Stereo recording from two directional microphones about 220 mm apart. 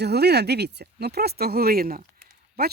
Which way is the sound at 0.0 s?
50° right (ahead or behind).